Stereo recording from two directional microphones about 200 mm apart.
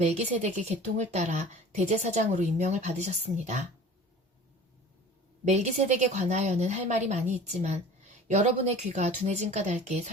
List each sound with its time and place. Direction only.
0.0 s speech: 35° right (ahead or behind)
5.5 s speech: 35° right (ahead or behind)